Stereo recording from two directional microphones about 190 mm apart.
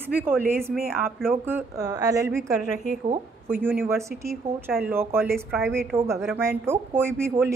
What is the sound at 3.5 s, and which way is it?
A woman's voice, 10° right (ahead or behind).